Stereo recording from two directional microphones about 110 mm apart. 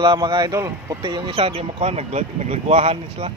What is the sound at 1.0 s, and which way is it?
Speech, 45° right (ahead or behind).